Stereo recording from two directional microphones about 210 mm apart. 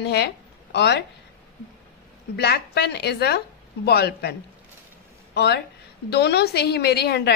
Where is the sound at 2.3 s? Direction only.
50° left (ahead or behind).